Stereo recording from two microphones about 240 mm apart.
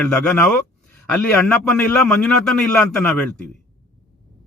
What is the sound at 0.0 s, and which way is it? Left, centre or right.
Speech, centre.